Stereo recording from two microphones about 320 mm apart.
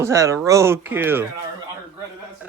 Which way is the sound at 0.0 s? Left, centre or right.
Centre.